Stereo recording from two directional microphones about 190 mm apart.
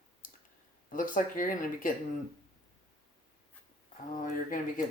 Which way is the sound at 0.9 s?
45° left (ahead or behind).